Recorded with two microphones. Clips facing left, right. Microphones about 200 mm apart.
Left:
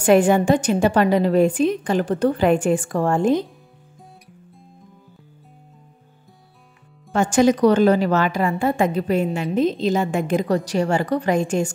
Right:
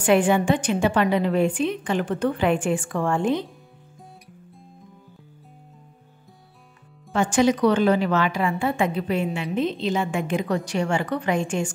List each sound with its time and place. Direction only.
0.0 s a woman's voice: 40° left (ahead or behind)
7.1 s a woman's voice: 45° left (ahead or behind)